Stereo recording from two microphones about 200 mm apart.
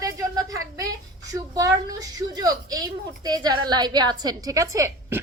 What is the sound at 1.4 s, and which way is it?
A woman's voice, 15° right (ahead or behind).